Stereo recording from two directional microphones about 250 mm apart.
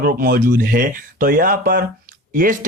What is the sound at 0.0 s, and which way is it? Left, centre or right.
Speech, right.